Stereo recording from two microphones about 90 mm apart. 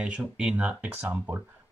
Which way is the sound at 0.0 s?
10° right (ahead or behind).